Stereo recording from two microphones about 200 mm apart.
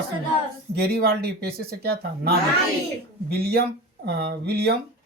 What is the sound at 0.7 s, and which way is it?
Speech, 50° right (ahead or behind).